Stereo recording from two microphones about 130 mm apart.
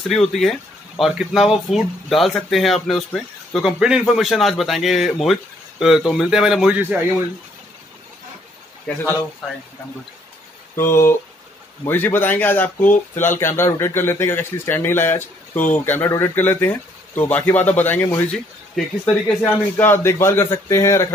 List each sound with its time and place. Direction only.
0.1 s speech: 5° left (ahead or behind)
6.8 s speech: 15° right (ahead or behind)
10.8 s speech: 20° left (ahead or behind)